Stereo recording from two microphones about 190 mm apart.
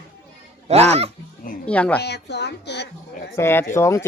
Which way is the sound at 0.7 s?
35° right (ahead or behind).